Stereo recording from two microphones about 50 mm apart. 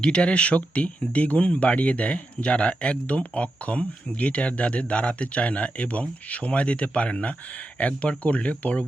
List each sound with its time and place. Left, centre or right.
0.0 s speech: centre